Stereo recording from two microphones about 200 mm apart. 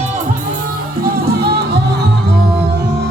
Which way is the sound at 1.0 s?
55° right (ahead or behind).